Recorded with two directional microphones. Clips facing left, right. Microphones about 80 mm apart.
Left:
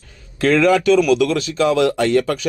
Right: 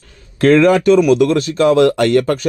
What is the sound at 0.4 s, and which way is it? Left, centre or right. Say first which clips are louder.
Speech: right 4 dB; right.